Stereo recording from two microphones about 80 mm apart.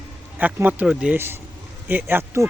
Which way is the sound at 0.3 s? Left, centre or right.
Right.